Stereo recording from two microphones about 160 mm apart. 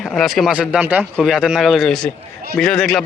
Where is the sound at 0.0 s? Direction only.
Centre (ahead or behind).